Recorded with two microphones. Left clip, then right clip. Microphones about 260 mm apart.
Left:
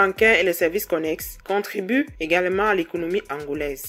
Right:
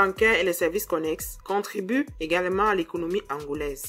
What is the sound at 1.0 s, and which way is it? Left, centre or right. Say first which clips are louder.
Speech: left 3 dB; centre.